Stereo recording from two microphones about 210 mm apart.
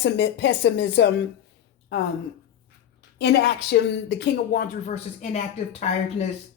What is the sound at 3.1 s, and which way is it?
Speech, 55° left (ahead or behind).